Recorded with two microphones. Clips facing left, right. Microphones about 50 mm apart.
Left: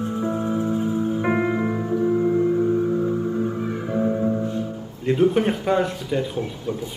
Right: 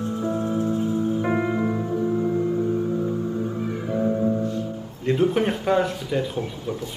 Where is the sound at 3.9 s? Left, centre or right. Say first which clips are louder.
Even; centre.